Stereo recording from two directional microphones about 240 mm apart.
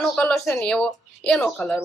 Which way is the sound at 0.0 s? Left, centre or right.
Centre.